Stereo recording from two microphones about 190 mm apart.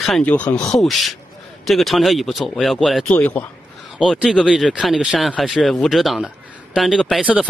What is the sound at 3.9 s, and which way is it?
Speech, 5° right (ahead or behind).